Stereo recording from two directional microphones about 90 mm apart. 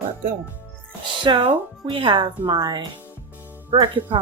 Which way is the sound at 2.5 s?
50° right (ahead or behind).